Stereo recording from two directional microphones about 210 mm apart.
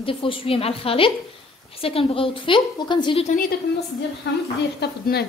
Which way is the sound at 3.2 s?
40° left (ahead or behind).